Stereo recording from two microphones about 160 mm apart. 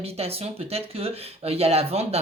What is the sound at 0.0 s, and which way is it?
Speech, 40° right (ahead or behind).